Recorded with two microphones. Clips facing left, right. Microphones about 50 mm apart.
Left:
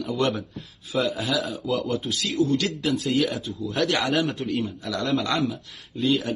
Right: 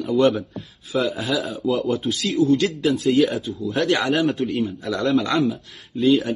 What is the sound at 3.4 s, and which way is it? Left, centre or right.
Speech, right.